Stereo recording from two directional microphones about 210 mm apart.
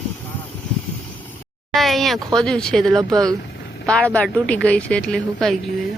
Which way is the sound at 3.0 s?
15° right (ahead or behind).